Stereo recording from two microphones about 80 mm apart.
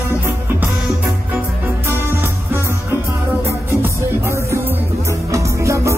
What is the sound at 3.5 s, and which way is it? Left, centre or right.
Music, right.